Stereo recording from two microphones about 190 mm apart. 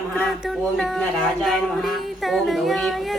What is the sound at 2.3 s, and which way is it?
Speech, centre (ahead or behind).